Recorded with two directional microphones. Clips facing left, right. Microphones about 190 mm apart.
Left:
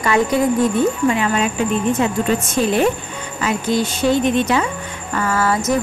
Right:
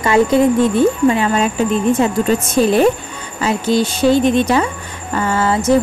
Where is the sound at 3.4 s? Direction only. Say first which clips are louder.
Right 3 dB; 30° right (ahead or behind).